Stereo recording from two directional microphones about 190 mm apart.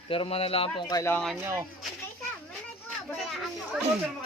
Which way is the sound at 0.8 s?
15° left (ahead or behind).